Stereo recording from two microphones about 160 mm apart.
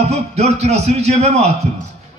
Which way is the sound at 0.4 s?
45° right (ahead or behind).